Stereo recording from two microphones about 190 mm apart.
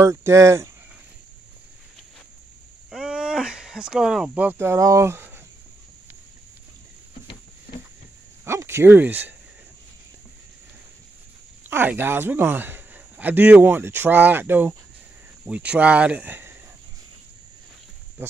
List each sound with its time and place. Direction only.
0.0 s speech: 15° right (ahead or behind)
2.9 s speech: 5° right (ahead or behind)
8.5 s speech: 15° right (ahead or behind)
11.7 s speech: 10° right (ahead or behind)